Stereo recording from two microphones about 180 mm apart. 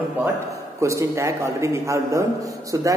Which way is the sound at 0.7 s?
15° right (ahead or behind).